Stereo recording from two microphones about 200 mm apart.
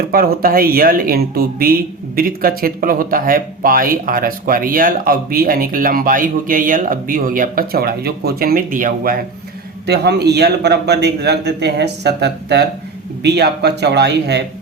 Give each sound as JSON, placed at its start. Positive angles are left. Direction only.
{"t": 0.1, "sound": "speech", "side_deg": -45}
{"t": 9.8, "sound": "a man's voice", "side_deg": -55}